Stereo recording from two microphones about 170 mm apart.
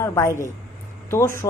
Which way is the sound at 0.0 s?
15° left (ahead or behind).